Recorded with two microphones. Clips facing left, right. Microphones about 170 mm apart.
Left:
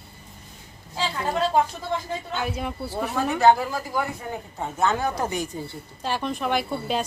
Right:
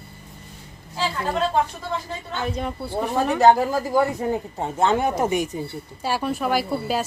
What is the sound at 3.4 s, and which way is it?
Speech, 40° right (ahead or behind).